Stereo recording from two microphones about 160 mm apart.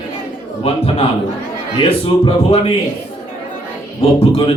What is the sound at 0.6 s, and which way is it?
Speech, 40° left (ahead or behind).